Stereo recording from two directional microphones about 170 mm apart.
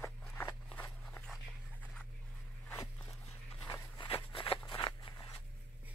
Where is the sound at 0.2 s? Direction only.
5° left (ahead or behind).